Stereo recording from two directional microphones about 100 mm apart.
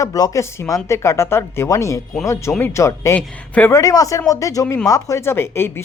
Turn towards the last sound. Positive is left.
turn(degrees=25)  # may be behind; listen again after turning